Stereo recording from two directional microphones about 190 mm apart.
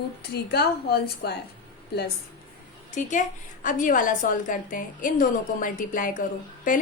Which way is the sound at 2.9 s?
40° left (ahead or behind).